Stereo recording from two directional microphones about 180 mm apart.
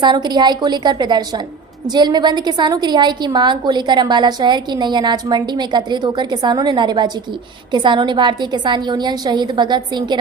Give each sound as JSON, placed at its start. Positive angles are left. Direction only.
{"t": 0.0, "sound": "a woman's voice", "side_deg": -25}